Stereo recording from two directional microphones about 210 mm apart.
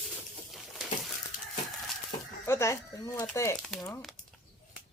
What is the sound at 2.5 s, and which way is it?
Speech, 10° left (ahead or behind).